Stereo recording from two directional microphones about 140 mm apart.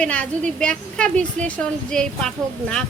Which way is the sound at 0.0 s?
10° left (ahead or behind).